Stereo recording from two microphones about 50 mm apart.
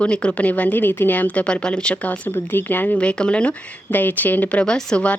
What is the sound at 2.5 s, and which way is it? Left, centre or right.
Speech, left.